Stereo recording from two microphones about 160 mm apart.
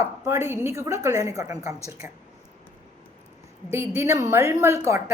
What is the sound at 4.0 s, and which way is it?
A woman's voice, 20° right (ahead or behind).